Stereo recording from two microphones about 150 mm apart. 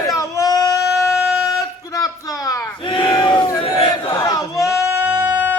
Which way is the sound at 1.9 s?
25° left (ahead or behind).